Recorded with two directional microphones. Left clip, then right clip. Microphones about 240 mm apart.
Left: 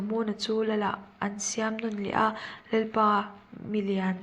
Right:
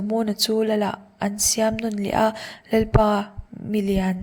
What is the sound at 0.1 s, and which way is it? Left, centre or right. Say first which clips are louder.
A woman's voice: right 7 dB; right.